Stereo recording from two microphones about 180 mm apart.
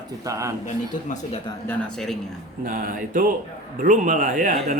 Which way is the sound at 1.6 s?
5° left (ahead or behind).